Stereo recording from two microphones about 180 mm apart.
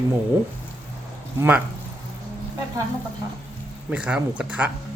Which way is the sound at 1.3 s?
10° right (ahead or behind).